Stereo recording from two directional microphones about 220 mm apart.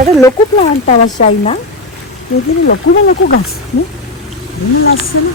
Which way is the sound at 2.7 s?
45° left (ahead or behind).